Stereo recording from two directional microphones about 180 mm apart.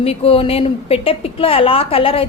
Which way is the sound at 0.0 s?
30° left (ahead or behind).